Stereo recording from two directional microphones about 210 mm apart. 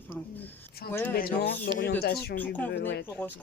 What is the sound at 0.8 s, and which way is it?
Speech, 45° left (ahead or behind).